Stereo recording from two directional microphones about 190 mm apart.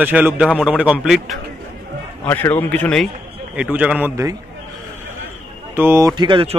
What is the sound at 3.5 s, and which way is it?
Speech, 5° right (ahead or behind).